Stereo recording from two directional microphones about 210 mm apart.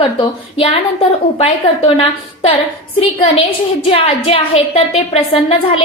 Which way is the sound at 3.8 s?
30° left (ahead or behind).